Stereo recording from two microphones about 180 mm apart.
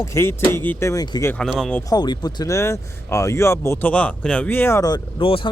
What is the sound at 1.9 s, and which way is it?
Speech, 20° left (ahead or behind).